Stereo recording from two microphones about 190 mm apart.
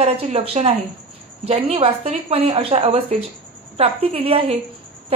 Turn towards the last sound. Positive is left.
turn(degrees=-30)  # may be behind; listen again after turning